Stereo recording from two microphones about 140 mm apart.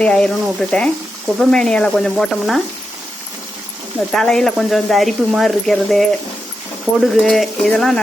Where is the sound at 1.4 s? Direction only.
5° left (ahead or behind).